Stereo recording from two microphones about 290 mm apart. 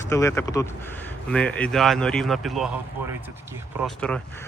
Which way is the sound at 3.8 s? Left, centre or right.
Centre.